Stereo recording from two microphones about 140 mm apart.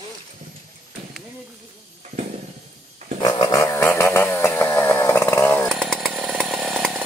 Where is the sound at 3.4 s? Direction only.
25° left (ahead or behind).